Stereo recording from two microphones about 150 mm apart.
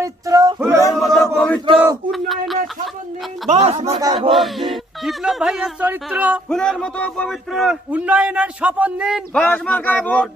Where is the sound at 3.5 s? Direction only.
45° right (ahead or behind).